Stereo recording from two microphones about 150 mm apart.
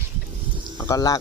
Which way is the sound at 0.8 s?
25° left (ahead or behind).